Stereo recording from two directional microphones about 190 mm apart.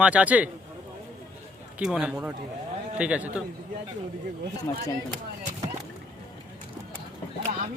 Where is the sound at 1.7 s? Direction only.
5° right (ahead or behind).